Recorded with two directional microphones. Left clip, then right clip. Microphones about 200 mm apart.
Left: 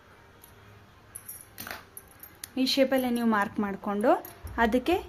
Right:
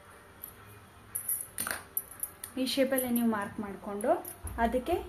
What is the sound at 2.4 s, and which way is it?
Speech, 35° left (ahead or behind).